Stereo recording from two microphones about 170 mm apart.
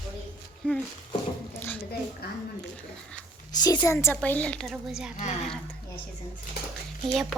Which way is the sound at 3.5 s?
25° left (ahead or behind).